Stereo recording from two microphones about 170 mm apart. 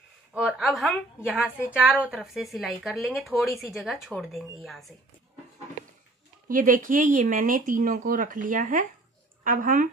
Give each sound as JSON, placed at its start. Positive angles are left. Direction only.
{"t": 0.3, "sound": "a woman's voice", "side_deg": -5}
{"t": 6.5, "sound": "speech", "side_deg": -50}